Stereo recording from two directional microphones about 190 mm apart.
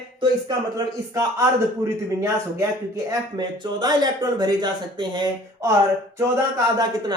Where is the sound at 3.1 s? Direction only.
20° right (ahead or behind).